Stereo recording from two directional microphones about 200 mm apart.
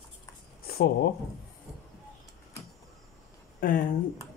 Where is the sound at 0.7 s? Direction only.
50° left (ahead or behind).